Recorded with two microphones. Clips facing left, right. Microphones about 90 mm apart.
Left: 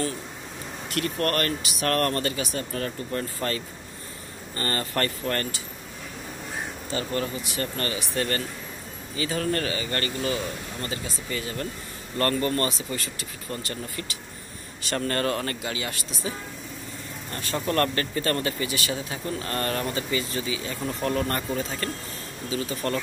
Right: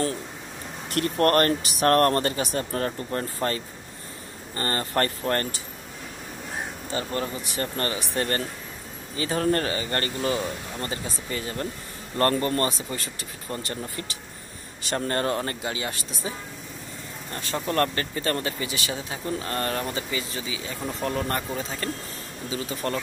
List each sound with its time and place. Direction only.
0.9 s speech: 35° right (ahead or behind)
6.9 s speech: 25° right (ahead or behind)